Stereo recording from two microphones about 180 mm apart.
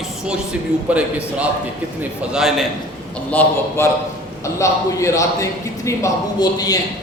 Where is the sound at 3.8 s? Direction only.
15° left (ahead or behind).